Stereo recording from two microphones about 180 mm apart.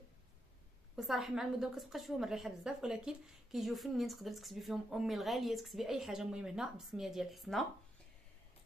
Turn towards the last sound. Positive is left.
turn(degrees=0)  # may be behind; listen again after turning